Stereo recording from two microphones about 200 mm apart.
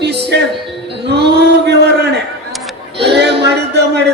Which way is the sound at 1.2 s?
55° right (ahead or behind).